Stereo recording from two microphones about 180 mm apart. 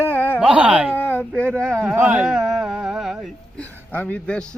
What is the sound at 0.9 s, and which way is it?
Speech, 10° left (ahead or behind).